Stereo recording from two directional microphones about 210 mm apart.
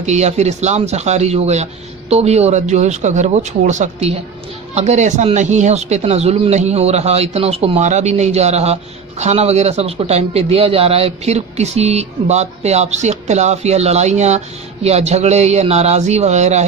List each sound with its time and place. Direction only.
0.0 s speech: 35° right (ahead or behind)